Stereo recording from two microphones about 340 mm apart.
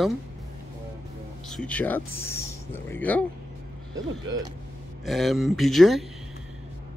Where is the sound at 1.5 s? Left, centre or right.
Centre.